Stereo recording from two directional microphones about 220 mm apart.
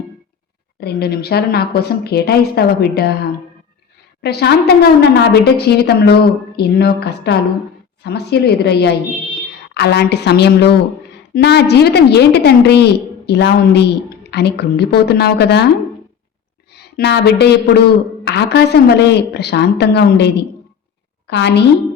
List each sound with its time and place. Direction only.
0.8 s a woman's voice: 45° left (ahead or behind)
16.7 s a woman's voice: 50° left (ahead or behind)